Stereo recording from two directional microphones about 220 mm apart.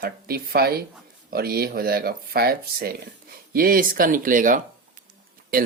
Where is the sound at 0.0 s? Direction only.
45° right (ahead or behind).